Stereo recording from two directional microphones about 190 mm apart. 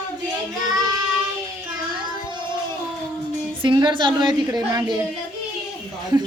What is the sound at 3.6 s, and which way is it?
A child's voice, 25° right (ahead or behind).